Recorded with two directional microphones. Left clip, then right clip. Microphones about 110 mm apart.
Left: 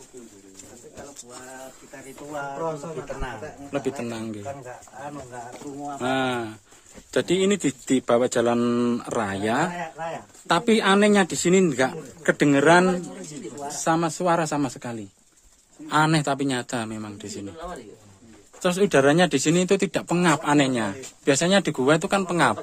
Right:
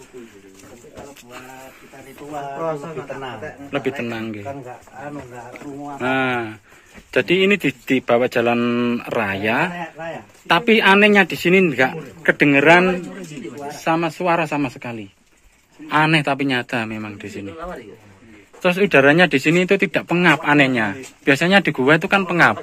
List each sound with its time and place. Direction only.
3.7 s a man's voice: 25° left (ahead or behind)
5.5 s speech: 40° left (ahead or behind)
7.8 s speech: 50° left (ahead or behind)
13.7 s speech: 70° left (ahead or behind); by 15.0 s 85° left
15.9 s speech: 55° left (ahead or behind); by 17.5 s 35° left (ahead or behind)
18.6 s speech: 40° left (ahead or behind)